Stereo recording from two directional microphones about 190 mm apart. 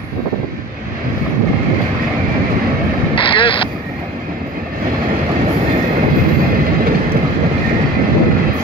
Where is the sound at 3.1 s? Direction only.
25° left (ahead or behind).